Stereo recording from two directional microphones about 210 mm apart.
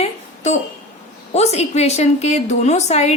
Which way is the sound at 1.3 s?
30° left (ahead or behind).